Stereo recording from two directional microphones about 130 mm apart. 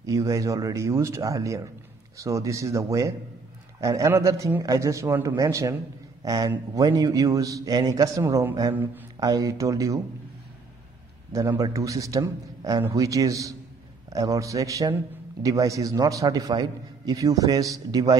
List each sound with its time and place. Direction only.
0.0 s a man's voice: 25° right (ahead or behind)
11.3 s a man's voice: 25° right (ahead or behind)